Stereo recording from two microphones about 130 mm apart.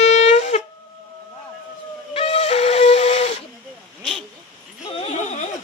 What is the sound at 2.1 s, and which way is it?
Steam whistle, 50° left (ahead or behind).